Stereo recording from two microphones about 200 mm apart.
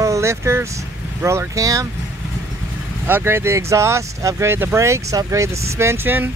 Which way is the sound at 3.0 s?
10° right (ahead or behind).